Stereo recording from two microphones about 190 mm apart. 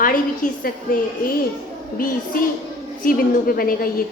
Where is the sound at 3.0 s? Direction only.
50° left (ahead or behind).